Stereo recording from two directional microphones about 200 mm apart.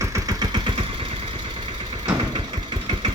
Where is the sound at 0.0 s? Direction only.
15° right (ahead or behind).